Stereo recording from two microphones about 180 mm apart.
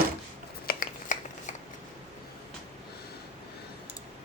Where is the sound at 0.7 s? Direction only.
50° left (ahead or behind).